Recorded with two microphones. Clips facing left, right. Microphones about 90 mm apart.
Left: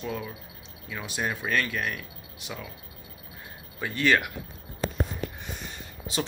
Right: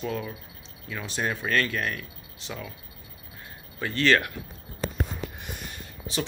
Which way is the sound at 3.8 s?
10° left (ahead or behind).